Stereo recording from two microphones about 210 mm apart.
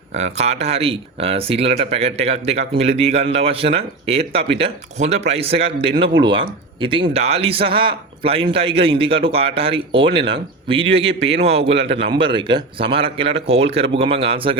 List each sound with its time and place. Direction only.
0.1 s speech: 30° right (ahead or behind)